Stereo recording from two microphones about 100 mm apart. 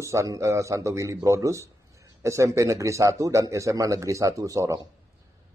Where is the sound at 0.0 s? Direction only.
30° right (ahead or behind).